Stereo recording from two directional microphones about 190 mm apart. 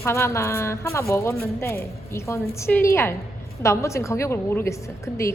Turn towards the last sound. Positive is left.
turn(degrees=15)  # may be behind; listen again after turning